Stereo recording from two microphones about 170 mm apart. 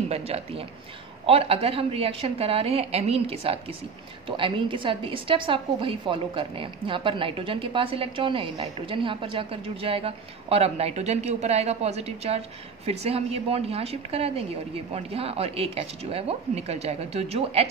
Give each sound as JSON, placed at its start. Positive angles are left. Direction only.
{"t": 0.1, "sound": "a woman's voice", "side_deg": -35}